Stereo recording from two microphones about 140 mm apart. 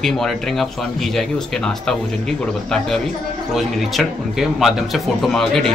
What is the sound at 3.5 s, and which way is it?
A man's voice, centre (ahead or behind).